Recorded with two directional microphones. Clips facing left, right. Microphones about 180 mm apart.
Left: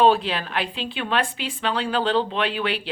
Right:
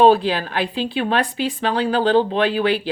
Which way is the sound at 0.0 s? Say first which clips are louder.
Right 4 dB; 40° right (ahead or behind).